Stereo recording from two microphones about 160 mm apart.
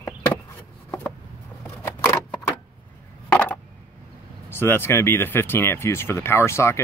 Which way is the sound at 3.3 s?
10° left (ahead or behind).